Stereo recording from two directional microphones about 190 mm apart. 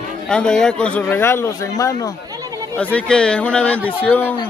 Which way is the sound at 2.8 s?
5° left (ahead or behind).